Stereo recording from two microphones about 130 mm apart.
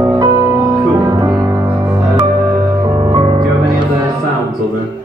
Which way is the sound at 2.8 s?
30° right (ahead or behind).